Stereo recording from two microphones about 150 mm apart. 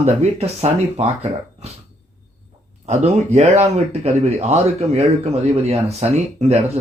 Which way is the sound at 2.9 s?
50° right (ahead or behind).